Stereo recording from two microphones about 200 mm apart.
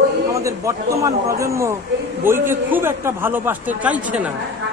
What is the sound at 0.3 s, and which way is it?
A man's voice, 15° right (ahead or behind).